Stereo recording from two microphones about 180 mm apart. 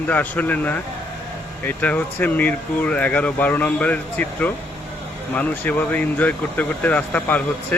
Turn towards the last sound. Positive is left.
turn(degrees=10)  # may be behind; listen again after turning